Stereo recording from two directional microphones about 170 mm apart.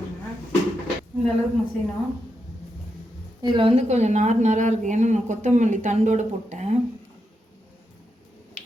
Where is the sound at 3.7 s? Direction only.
40° right (ahead or behind).